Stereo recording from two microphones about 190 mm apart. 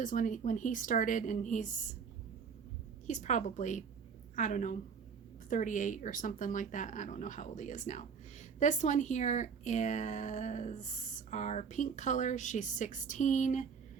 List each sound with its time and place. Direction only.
0.0 s speech: 45° left (ahead or behind)
3.1 s speech: 40° left (ahead or behind)